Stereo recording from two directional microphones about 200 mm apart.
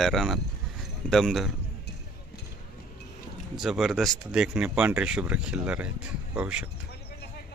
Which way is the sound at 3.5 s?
Centre (ahead or behind).